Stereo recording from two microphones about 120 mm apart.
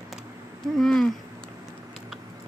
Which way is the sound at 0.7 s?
5° left (ahead or behind).